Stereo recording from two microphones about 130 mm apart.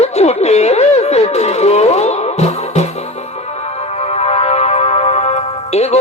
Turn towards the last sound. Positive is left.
turn(degrees=55)  # may be behind; listen again after turning